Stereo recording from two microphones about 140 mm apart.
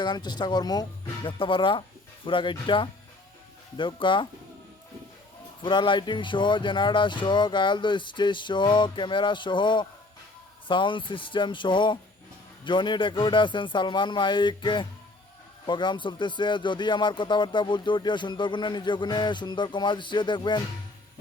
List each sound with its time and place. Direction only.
0.0 s a man's voice: 30° left (ahead or behind)
5.6 s a man's voice: 35° left (ahead or behind)